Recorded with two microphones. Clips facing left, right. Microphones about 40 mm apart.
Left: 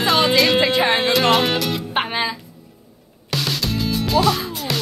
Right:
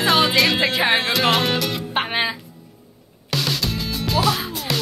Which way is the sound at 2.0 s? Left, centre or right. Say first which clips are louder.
Even; centre.